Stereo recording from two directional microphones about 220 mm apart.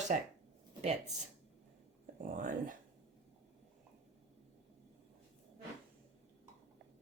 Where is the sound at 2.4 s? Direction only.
35° right (ahead or behind).